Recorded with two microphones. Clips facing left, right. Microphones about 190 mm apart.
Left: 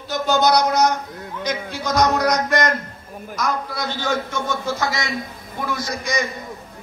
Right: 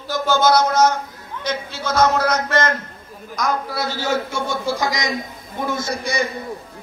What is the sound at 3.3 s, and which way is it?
A man's voice, 5° right (ahead or behind).